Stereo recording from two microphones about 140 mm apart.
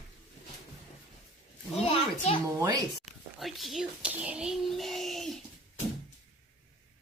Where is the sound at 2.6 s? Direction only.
25° right (ahead or behind).